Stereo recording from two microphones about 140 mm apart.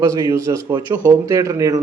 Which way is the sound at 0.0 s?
25° right (ahead or behind).